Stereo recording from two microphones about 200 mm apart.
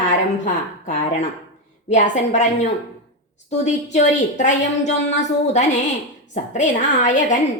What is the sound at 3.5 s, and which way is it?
A woman's voice, 35° left (ahead or behind).